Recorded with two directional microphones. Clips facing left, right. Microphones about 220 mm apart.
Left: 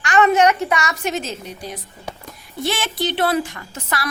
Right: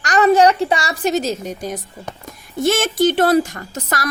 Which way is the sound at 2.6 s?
45° right (ahead or behind).